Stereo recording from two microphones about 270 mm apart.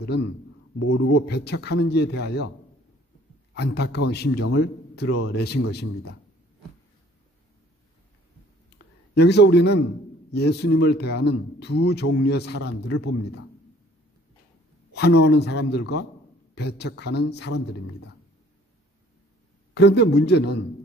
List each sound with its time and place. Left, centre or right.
0.0 s speech: left
0.8 s speech: left
1.1 s speech: left
3.5 s a man's voice: left
9.1 s speech: left
14.9 s a sound: left
15.2 s speech: left
19.7 s speech: left